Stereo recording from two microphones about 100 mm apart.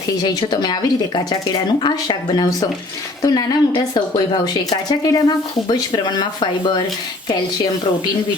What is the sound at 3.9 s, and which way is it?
Speech, 50° left (ahead or behind).